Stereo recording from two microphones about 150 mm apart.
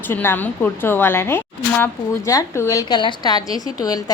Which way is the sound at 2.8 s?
30° left (ahead or behind).